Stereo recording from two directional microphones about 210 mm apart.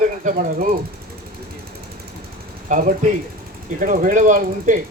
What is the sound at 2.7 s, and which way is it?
Speech, 40° right (ahead or behind).